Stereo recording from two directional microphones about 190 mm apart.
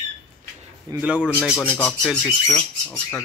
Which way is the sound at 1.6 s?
10° left (ahead or behind).